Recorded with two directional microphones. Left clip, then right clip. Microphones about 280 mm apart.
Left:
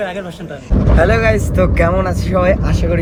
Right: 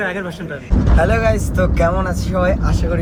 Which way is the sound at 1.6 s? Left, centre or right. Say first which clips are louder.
Left 3 dB; left.